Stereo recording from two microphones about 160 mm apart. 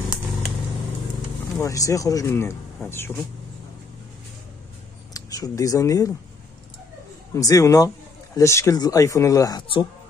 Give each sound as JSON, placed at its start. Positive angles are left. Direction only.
{"t": 1.6, "sound": "speech", "side_deg": 20}
{"t": 5.1, "sound": "speech", "side_deg": 20}
{"t": 7.3, "sound": "speech", "side_deg": 20}